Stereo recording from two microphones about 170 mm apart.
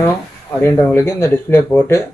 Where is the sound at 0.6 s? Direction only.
15° left (ahead or behind).